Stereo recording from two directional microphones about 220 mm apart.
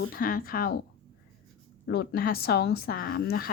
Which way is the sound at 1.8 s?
50° left (ahead or behind).